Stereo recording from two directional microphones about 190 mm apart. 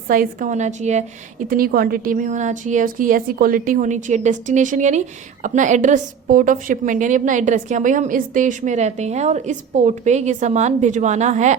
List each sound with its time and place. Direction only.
0.1 s a woman's voice: 45° right (ahead or behind)
1.5 s a woman's voice: 50° right (ahead or behind)